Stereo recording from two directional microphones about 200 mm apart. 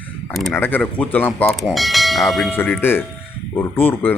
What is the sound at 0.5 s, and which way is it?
Speech, 10° left (ahead or behind).